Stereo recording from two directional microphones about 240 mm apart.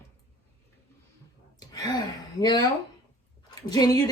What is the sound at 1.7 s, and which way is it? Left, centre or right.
Speech, centre.